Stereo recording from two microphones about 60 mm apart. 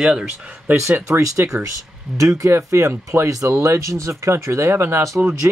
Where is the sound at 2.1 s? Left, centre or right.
Right.